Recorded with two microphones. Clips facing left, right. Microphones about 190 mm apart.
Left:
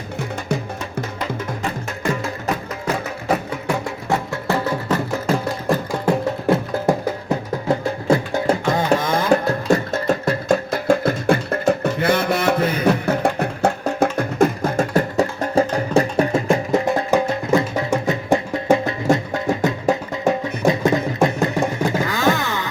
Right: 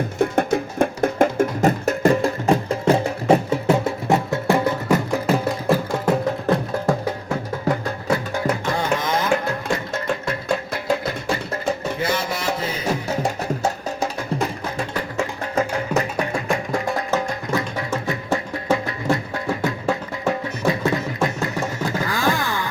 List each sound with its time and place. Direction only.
0.5 s music: 55° right (ahead or behind); by 4.9 s 15° right (ahead or behind)
5.2 s music: centre (ahead or behind)
6.8 s music: 25° left (ahead or behind)
9.0 s music: 40° left (ahead or behind); by 22.7 s 20° left (ahead or behind)